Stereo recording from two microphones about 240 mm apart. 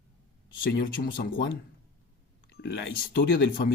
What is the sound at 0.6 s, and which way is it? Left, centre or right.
Speech, left.